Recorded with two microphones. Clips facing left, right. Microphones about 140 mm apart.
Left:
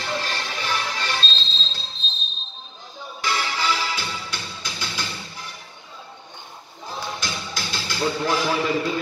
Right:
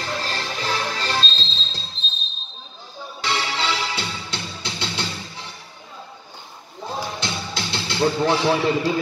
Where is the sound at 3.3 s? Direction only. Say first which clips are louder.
Even; 25° right (ahead or behind).